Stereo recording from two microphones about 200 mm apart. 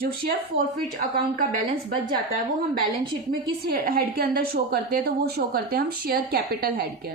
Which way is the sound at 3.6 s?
50° right (ahead or behind).